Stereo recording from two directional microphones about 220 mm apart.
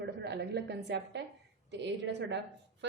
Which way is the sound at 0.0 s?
50° right (ahead or behind).